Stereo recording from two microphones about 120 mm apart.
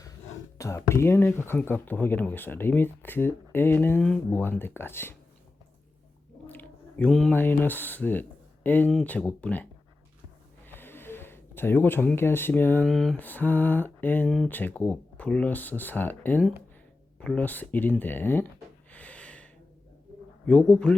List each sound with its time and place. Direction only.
0.6 s speech: 25° left (ahead or behind)
6.5 s a sound: 15° left (ahead or behind)
7.1 s speech: 5° left (ahead or behind)
7.3 s speech: 15° left (ahead or behind)
10.7 s a sound: 15° left (ahead or behind)
12.8 s speech: 5° left (ahead or behind)
13.1 s speech: 15° left (ahead or behind)
18.9 s a sound: 10° left (ahead or behind)
20.5 s speech: 10° left (ahead or behind)